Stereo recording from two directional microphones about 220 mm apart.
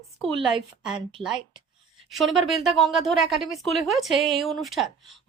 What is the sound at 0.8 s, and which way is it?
Speech, centre (ahead or behind).